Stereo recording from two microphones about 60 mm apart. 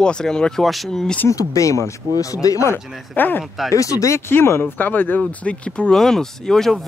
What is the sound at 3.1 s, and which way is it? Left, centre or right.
Speech, left.